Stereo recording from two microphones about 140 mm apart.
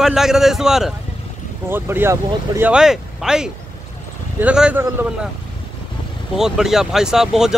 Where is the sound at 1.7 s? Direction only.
15° right (ahead or behind).